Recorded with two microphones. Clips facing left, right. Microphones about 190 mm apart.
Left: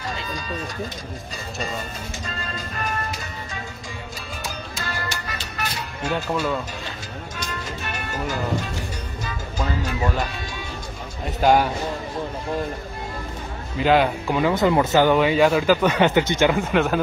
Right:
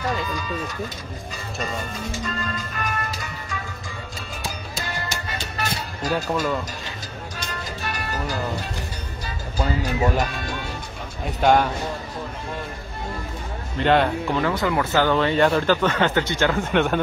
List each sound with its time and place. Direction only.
2.5 s music: 30° left (ahead or behind)
4.8 s music: 20° right (ahead or behind)
7.8 s music: 35° right (ahead or behind)
9.2 s speech: 35° right (ahead or behind)
10.4 s music: 55° right (ahead or behind)
11.2 s speech: centre (ahead or behind)
13.7 s speech: 5° left (ahead or behind)
14.4 s speech: 25° left (ahead or behind)
16.5 s speech: 5° left (ahead or behind)